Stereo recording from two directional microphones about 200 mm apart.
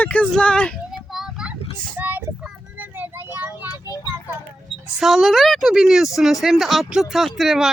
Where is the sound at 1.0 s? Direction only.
Centre (ahead or behind).